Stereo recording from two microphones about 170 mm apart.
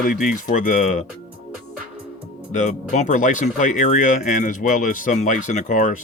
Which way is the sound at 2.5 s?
45° left (ahead or behind).